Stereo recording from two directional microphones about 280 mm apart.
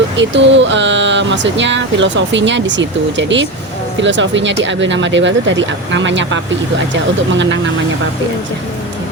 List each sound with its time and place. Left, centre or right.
0.2 s speech: right